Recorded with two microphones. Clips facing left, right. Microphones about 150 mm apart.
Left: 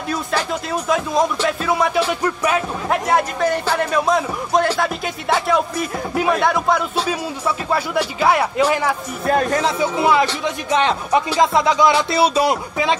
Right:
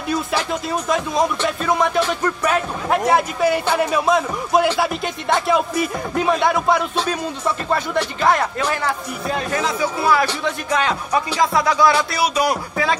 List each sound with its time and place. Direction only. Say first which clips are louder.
0.1 s a man's voice: right 1 dB; centre (ahead or behind)
2.9 s a man's voice: right 1 dB; 5° right (ahead or behind)
9.3 s speech: left 6 dB; 45° left (ahead or behind)
9.6 s speech: left 3 dB; 25° left (ahead or behind)